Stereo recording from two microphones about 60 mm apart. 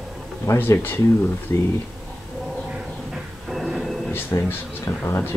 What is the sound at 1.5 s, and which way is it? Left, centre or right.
Speech, left.